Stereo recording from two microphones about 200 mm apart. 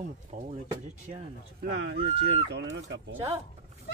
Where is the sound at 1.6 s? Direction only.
60° right (ahead or behind).